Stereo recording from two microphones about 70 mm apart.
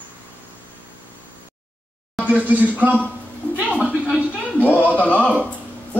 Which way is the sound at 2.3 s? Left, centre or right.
Right.